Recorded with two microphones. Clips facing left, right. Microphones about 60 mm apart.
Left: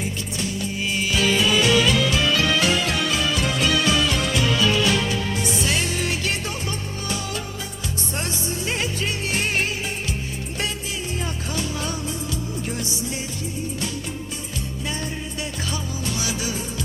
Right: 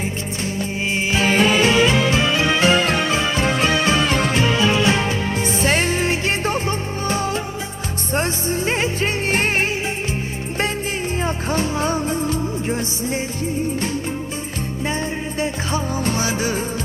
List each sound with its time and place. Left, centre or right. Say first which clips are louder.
0.0 s music: right 3 dB; right
11.2 s music: right 9 dB; right
15.4 s music: right 9 dB; right